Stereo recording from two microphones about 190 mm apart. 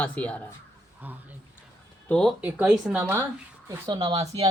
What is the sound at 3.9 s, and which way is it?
Speech, 25° right (ahead or behind).